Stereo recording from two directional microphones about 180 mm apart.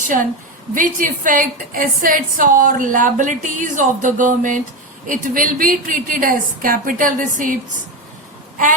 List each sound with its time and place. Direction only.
0.7 s a woman's voice: 50° right (ahead or behind)